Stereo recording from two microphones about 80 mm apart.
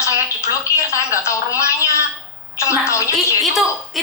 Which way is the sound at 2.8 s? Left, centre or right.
Left.